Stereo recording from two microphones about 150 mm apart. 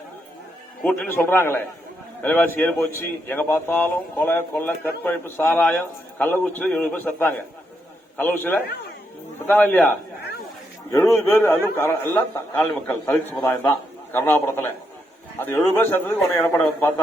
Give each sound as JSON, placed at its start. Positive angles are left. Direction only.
{"t": 0.8, "sound": "speech", "side_deg": 10}
{"t": 10.9, "sound": "speech", "side_deg": 20}